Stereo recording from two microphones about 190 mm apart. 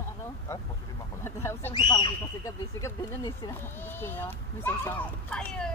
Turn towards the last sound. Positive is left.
turn(degrees=5)  # may be behind; listen again after turning